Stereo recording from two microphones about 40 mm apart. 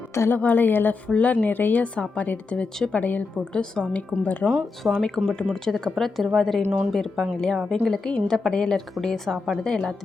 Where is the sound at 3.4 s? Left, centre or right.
Left.